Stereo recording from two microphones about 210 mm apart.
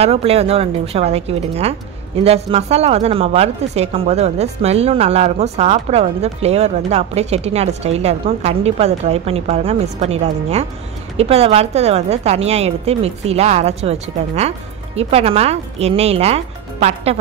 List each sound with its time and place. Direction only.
0.0 s a woman's voice: 30° right (ahead or behind)